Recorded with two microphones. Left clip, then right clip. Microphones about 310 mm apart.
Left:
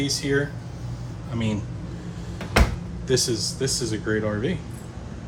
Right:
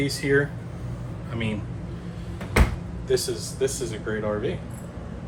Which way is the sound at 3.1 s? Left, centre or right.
Left.